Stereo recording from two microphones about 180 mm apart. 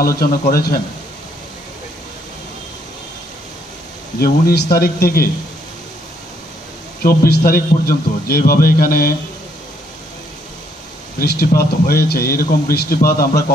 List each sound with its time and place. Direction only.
0.2 s speech: 55° left (ahead or behind)
4.2 s speech: 60° left (ahead or behind)
7.0 s speech: 55° left (ahead or behind)
11.1 s speech: 60° left (ahead or behind)